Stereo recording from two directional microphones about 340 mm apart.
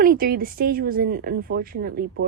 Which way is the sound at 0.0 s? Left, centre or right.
Right.